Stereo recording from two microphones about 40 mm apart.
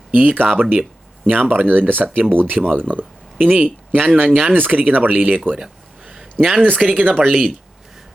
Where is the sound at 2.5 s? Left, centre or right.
Right.